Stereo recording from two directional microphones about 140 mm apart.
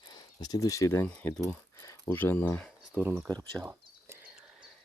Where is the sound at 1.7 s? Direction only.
20° left (ahead or behind).